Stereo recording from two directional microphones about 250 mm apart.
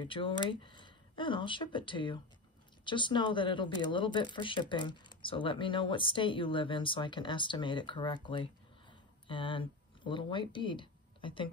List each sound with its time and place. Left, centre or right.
0.0 s speech: centre